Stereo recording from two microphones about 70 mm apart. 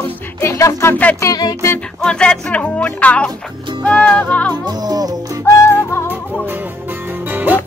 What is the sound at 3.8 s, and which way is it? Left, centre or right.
Music, centre.